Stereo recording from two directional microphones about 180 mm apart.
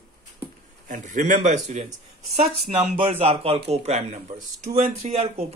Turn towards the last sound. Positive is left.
turn(degrees=-40)  # may be behind; listen again after turning